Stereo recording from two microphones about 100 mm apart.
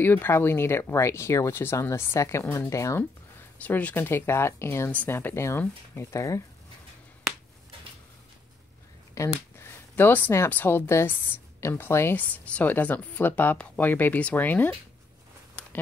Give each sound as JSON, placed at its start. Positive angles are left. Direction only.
{"t": 0.0, "sound": "speech", "side_deg": 20}
{"t": 3.6, "sound": "speech", "side_deg": 15}
{"t": 9.1, "sound": "a sound", "side_deg": 30}
{"t": 9.9, "sound": "speech", "side_deg": 20}
{"t": 12.2, "sound": "speech", "side_deg": 15}
{"t": 15.6, "sound": "a sound", "side_deg": 10}